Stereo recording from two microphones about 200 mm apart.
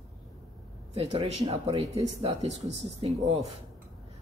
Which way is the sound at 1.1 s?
30° right (ahead or behind).